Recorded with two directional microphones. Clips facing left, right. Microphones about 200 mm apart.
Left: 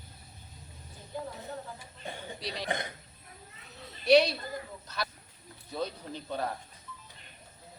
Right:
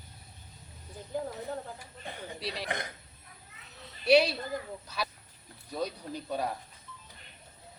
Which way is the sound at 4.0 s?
5° right (ahead or behind).